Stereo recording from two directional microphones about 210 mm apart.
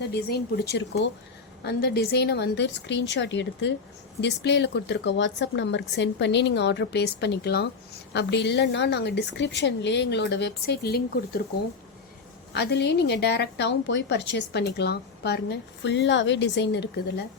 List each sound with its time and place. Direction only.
0.1 s a woman's voice: 50° left (ahead or behind)
12.5 s a woman's voice: 55° left (ahead or behind)